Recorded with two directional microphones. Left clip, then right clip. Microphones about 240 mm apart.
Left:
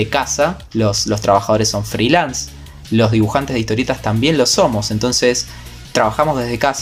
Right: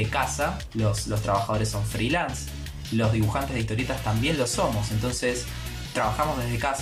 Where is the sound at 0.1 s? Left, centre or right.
Left.